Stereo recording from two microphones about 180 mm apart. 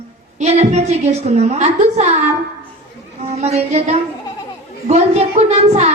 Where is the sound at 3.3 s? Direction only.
35° right (ahead or behind).